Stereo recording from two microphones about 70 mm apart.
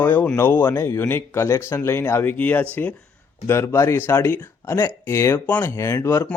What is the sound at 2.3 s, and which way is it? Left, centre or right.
Speech, left.